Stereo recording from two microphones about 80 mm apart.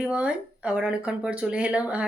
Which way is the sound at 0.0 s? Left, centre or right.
Centre.